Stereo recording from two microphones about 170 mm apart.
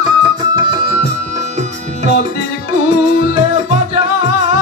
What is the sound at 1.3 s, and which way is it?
Music, 40° right (ahead or behind).